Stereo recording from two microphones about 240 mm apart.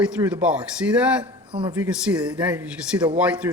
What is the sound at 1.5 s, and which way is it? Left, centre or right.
Speech, centre.